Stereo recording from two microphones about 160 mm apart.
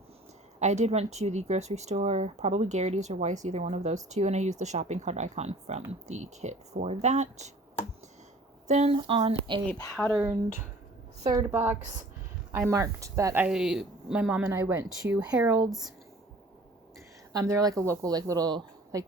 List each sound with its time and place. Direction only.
0.6 s speech: 45° right (ahead or behind)
8.6 s speech: 45° right (ahead or behind)
10.0 s speech: centre (ahead or behind)
11.2 s a woman's voice: 20° right (ahead or behind)
17.3 s a woman's voice: 20° right (ahead or behind)